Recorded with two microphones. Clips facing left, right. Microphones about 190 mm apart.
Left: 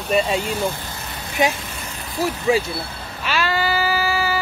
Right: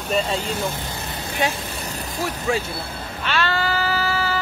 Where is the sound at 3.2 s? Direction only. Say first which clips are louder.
Left 1 dB; 10° left (ahead or behind).